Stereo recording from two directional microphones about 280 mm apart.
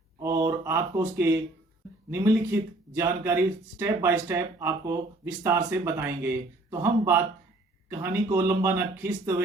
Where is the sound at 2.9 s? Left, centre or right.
Centre.